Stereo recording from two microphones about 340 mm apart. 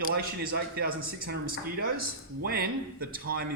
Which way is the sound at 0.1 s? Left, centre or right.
Right.